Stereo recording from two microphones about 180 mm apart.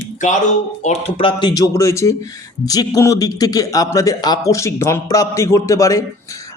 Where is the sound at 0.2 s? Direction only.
45° left (ahead or behind).